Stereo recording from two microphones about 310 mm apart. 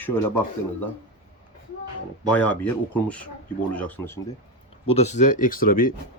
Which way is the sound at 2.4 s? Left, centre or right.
Centre.